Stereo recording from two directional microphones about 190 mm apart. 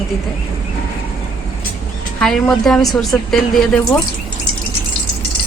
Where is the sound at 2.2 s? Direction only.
Centre (ahead or behind).